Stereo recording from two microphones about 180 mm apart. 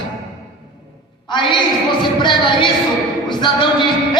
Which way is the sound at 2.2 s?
25° left (ahead or behind).